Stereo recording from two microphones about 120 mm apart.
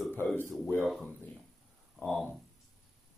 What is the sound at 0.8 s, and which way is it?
Speech, centre (ahead or behind).